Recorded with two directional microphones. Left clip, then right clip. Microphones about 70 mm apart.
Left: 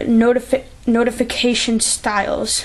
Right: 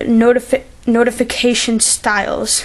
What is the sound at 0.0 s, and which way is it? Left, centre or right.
Speech, right.